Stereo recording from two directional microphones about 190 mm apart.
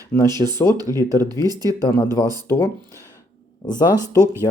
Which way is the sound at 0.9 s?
15° left (ahead or behind).